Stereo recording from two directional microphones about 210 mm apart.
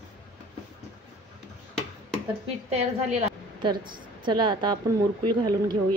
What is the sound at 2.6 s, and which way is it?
A woman's voice, 30° right (ahead or behind).